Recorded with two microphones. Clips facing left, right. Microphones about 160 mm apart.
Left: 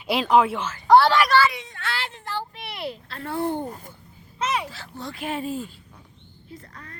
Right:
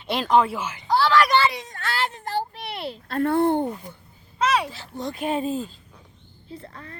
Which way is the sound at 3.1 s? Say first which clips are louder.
Right 8 dB; 55° right (ahead or behind).